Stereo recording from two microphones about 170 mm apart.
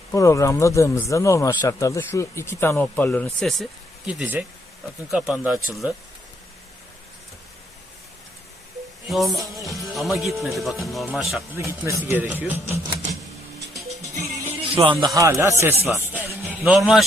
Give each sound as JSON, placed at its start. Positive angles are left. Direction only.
{"t": 0.1, "sound": "speech", "side_deg": 20}
{"t": 9.0, "sound": "speech", "side_deg": 0}
{"t": 11.5, "sound": "speech", "side_deg": -15}
{"t": 14.0, "sound": "music", "side_deg": -20}
{"t": 14.8, "sound": "speech", "side_deg": -20}
{"t": 16.0, "sound": "music", "side_deg": -10}